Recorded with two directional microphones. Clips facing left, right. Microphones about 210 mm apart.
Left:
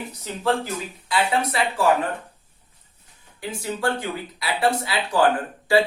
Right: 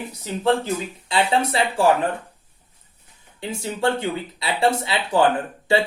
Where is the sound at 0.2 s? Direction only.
25° right (ahead or behind).